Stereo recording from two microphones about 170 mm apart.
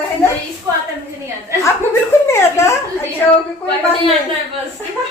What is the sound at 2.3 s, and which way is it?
Speech, 15° left (ahead or behind).